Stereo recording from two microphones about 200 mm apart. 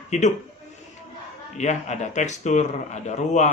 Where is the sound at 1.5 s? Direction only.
35° left (ahead or behind).